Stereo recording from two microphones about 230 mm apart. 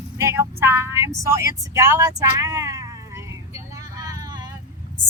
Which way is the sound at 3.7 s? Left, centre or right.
Centre.